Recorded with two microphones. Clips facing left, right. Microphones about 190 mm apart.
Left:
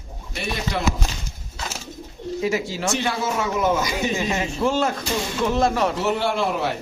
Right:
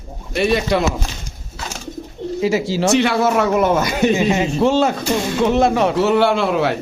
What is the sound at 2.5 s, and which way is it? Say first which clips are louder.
Speech: right 6 dB; 90° right.